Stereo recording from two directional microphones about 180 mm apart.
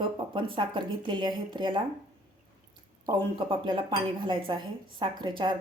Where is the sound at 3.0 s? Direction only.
25° right (ahead or behind).